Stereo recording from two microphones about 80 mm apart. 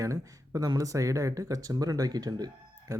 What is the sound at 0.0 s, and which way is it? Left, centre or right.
Speech, right.